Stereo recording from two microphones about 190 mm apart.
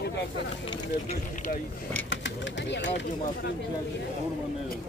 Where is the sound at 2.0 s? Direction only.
75° left (ahead or behind).